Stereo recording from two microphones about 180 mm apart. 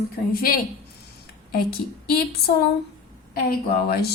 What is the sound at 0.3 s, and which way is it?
Speech, 55° left (ahead or behind).